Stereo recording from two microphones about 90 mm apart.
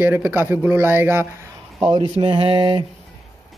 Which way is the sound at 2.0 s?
65° right (ahead or behind).